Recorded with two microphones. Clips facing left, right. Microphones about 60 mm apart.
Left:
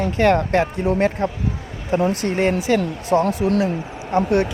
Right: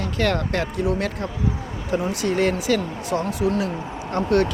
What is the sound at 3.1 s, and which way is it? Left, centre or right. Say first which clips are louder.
Speech: left 7 dB; left.